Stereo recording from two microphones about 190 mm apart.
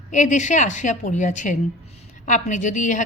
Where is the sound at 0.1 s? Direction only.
40° left (ahead or behind).